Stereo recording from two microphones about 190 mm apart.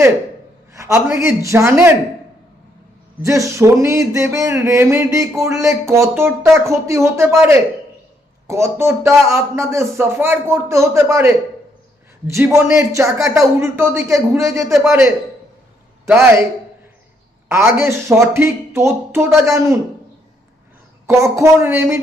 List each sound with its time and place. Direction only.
0.7 s speech: 15° right (ahead or behind)
3.2 s speech: 15° right (ahead or behind)
17.5 s speech: 15° right (ahead or behind)
21.1 s speech: 15° right (ahead or behind)